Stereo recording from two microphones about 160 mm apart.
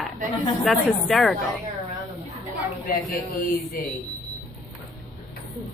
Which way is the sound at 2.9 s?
65° left (ahead or behind).